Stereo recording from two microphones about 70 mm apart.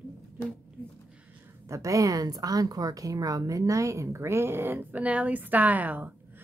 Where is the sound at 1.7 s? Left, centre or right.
Right.